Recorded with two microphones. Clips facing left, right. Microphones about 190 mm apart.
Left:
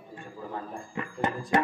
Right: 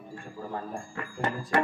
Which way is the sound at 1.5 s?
20° left (ahead or behind).